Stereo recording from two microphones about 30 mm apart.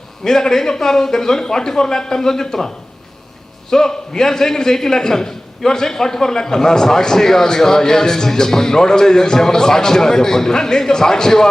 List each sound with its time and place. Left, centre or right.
0.3 s a man's voice: centre
3.7 s a man's voice: centre